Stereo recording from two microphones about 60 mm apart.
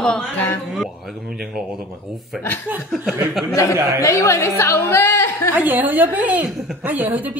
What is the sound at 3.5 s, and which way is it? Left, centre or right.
Speech, left.